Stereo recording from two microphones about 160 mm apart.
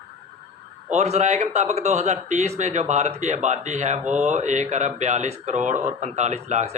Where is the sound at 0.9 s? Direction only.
45° right (ahead or behind).